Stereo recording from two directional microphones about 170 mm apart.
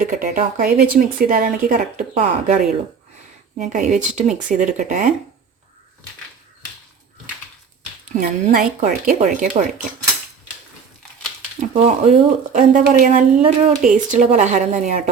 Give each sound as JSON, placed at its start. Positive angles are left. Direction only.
{"t": 0.0, "sound": "speech", "side_deg": -50}
{"t": 3.6, "sound": "speech", "side_deg": -45}
{"t": 8.1, "sound": "speech", "side_deg": -50}
{"t": 11.6, "sound": "speech", "side_deg": -40}
{"t": 13.4, "sound": "speech", "side_deg": -35}
{"t": 13.8, "sound": "speech", "side_deg": -50}